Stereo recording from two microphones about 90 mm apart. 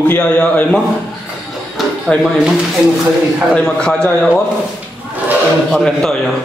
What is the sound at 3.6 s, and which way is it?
Speech, 10° left (ahead or behind).